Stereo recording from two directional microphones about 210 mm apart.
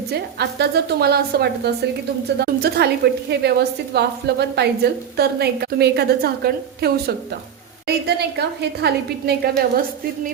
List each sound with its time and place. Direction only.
0.1 s a woman's voice: 50° right (ahead or behind)